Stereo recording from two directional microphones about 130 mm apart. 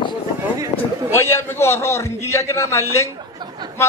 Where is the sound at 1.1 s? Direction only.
20° left (ahead or behind).